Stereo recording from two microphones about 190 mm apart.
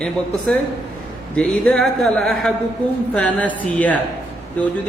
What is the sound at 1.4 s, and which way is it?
Speech, 5° left (ahead or behind).